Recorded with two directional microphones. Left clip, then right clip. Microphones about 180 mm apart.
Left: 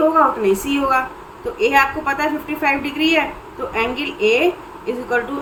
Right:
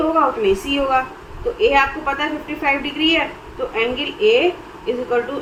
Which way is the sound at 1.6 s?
25° left (ahead or behind).